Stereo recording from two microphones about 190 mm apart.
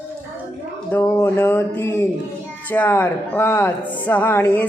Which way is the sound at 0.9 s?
10° left (ahead or behind).